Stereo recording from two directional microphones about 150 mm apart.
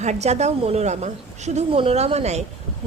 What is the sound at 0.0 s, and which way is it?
A woman's voice, 50° right (ahead or behind).